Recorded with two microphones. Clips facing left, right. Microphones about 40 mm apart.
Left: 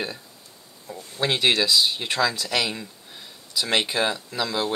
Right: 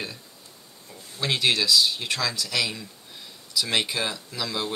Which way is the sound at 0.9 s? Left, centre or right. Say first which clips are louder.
Left 8 dB; left.